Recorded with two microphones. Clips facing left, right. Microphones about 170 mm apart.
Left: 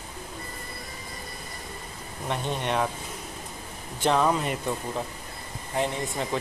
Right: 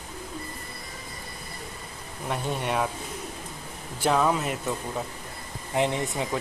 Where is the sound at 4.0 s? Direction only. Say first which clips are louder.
Even; 5° right (ahead or behind).